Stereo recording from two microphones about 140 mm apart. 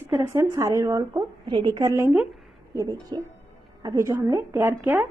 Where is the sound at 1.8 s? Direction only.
20° right (ahead or behind).